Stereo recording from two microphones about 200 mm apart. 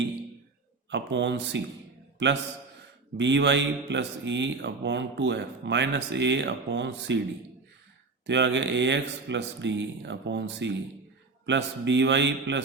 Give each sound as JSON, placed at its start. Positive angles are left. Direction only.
{"t": 0.9, "sound": "a man's voice", "side_deg": -65}
{"t": 8.3, "sound": "speech", "side_deg": -60}